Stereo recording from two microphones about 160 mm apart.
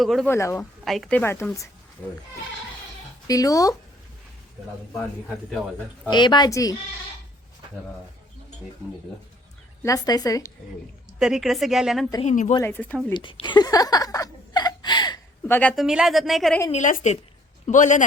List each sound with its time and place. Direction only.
0.0 s speech: centre (ahead or behind)
0.3 s a woman's voice: 15° left (ahead or behind)
0.6 s a woman's voice: 5° left (ahead or behind)
3.2 s a woman's voice: 20° left (ahead or behind)
6.1 s a woman's voice: 30° left (ahead or behind)
9.8 s a woman's voice: 25° left (ahead or behind)
11.2 s speech: 5° right (ahead or behind)
12.2 s a woman's voice: 50° left (ahead or behind)
12.5 s a woman's voice: 15° left (ahead or behind)
13.1 s speech: 30° left (ahead or behind)
15.4 s a woman's voice: 15° left (ahead or behind)
15.7 s speech: centre (ahead or behind)
16.7 s a woman's voice: 50° left (ahead or behind)